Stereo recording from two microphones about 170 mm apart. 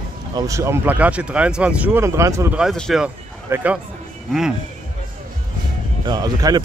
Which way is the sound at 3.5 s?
15° right (ahead or behind).